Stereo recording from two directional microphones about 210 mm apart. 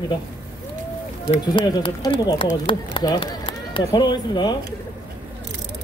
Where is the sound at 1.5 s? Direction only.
20° left (ahead or behind).